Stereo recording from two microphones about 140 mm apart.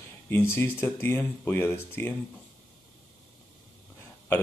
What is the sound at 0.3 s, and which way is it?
Speech, 15° left (ahead or behind).